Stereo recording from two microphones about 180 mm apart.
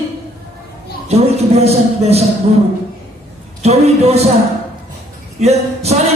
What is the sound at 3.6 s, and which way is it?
Speech, 35° right (ahead or behind).